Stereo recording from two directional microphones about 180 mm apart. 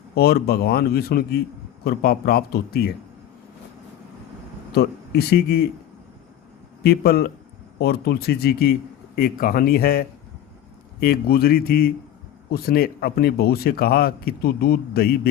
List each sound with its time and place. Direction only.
0.1 s a man's voice: 60° left (ahead or behind)
4.7 s speech: 60° left (ahead or behind)
6.8 s a man's voice: 60° left (ahead or behind)